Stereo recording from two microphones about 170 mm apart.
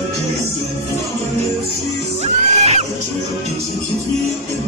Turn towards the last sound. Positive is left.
turn(degrees=-40)  # may be behind; listen again after turning